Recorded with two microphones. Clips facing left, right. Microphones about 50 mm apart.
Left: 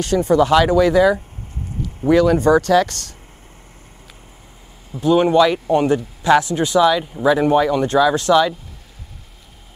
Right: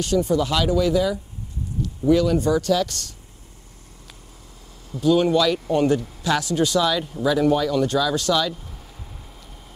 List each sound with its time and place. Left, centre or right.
0.0 s speech: left
5.0 s speech: left